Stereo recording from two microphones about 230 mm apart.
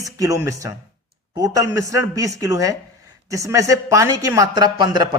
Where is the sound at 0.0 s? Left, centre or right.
Centre.